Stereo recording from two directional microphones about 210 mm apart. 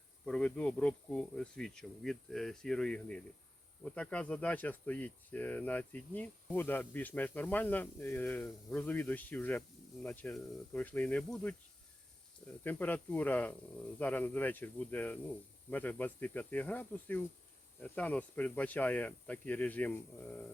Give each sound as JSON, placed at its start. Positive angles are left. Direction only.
{"t": 0.3, "sound": "speech", "side_deg": 5}
{"t": 12.6, "sound": "speech", "side_deg": 10}